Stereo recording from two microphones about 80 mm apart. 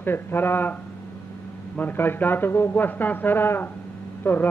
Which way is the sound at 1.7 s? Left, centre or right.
Left.